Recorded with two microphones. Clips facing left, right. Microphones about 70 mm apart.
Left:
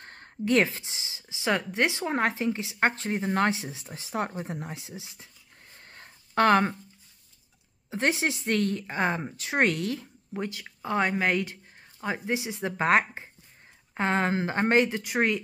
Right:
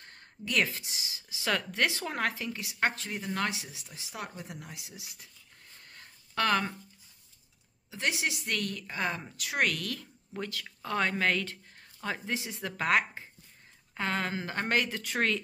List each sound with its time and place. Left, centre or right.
0.0 s a woman's voice: left
5.8 s a sound: left
7.9 s a woman's voice: left; by 15.4 s centre